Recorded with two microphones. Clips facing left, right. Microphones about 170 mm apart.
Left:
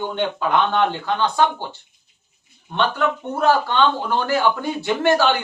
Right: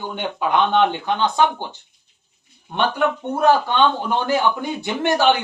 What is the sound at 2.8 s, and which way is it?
A man's voice, 15° right (ahead or behind).